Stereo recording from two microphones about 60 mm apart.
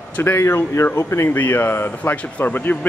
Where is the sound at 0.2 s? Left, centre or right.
Left.